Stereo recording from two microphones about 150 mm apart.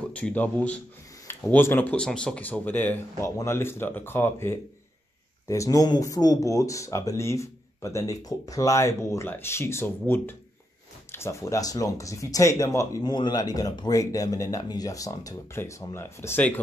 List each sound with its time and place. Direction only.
0.1 s speech: 10° left (ahead or behind)